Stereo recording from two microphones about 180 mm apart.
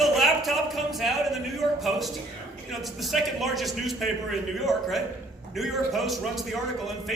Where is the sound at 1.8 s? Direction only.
Centre (ahead or behind).